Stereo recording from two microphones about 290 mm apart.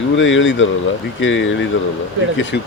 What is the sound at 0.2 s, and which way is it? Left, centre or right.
Speech, left.